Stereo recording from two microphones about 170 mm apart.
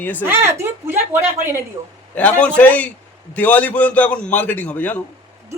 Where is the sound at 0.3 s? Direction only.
15° right (ahead or behind).